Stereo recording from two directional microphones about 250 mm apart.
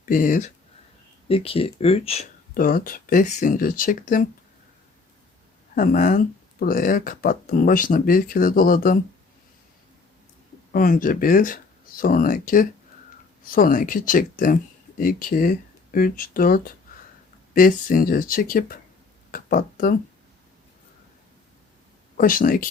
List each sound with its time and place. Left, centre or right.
0.0 s speech: left
2.6 s speech: left
5.7 s speech: left
10.7 s speech: left
19.3 s a sound: left
22.2 s speech: left